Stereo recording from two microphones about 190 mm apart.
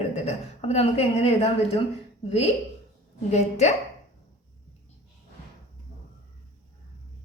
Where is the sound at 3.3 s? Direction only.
35° left (ahead or behind).